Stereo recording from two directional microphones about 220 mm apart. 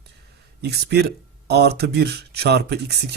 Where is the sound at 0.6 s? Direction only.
50° right (ahead or behind).